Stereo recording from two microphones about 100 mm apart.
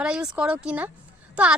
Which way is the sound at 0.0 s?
10° right (ahead or behind).